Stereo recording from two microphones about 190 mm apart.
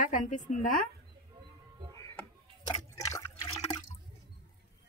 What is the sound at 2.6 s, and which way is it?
Liquid, 15° left (ahead or behind).